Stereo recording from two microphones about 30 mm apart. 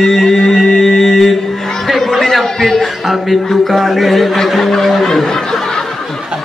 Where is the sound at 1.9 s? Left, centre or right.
Centre.